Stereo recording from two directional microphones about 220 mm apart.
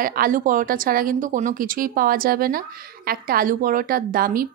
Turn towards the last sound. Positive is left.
turn(degrees=-40)  # may be behind; listen again after turning